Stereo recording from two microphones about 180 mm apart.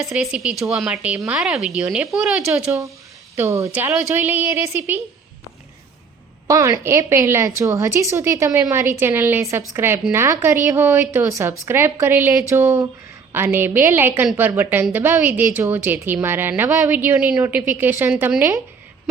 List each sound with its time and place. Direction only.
0.0 s speech: 5° right (ahead or behind)
3.3 s a woman's voice: 15° right (ahead or behind)
6.5 s a woman's voice: 15° right (ahead or behind)